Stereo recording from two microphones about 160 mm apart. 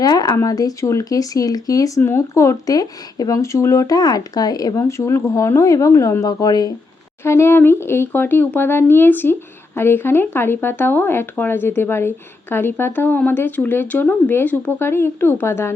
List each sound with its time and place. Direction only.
0.0 s speech: 25° left (ahead or behind)